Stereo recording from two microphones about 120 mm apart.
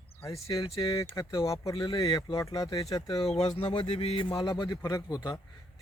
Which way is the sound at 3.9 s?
60° left (ahead or behind).